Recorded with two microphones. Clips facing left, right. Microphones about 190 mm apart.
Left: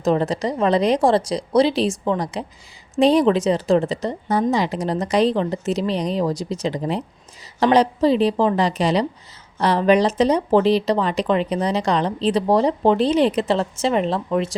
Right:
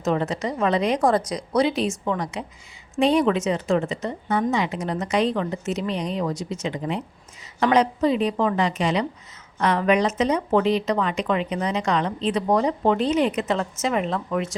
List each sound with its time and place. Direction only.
0.0 s speech: 35° left (ahead or behind)